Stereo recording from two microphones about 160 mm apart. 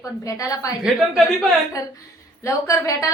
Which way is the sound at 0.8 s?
Centre (ahead or behind).